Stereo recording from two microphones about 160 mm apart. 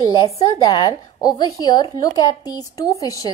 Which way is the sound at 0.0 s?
25° left (ahead or behind).